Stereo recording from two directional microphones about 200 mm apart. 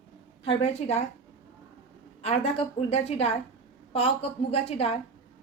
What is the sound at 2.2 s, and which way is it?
A woman's voice, 30° left (ahead or behind).